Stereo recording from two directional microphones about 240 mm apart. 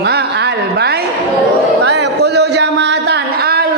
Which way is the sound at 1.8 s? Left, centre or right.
Right.